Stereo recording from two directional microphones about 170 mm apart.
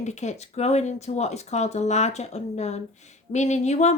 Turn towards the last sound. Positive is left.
turn(degrees=40)  # may be behind; listen again after turning